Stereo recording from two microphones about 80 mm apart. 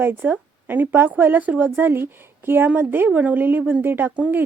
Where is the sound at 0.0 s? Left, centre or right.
Right.